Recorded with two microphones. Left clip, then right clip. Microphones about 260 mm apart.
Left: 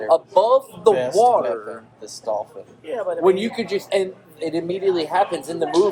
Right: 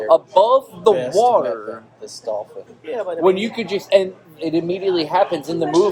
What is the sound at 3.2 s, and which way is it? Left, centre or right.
A man's voice, right.